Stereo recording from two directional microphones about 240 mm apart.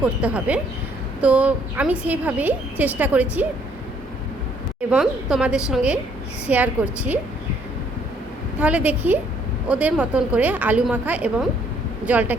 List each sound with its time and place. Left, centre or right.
0.0 s a woman's voice: centre
4.9 s a woman's voice: centre
8.5 s a woman's voice: centre